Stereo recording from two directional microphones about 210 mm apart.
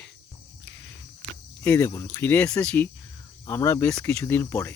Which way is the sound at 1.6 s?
10° left (ahead or behind).